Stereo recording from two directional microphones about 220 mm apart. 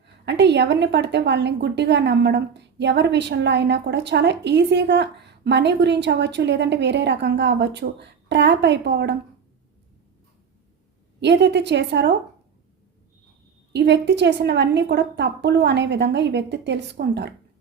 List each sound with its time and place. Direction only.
0.0 s a woman's voice: 50° right (ahead or behind)
11.2 s a woman's voice: 50° right (ahead or behind)
13.7 s a woman's voice: 50° right (ahead or behind)